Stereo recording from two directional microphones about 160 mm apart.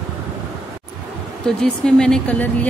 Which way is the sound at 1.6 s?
5° left (ahead or behind).